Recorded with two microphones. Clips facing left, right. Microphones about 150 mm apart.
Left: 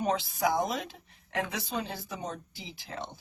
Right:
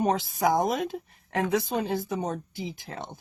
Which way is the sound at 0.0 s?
45° right (ahead or behind).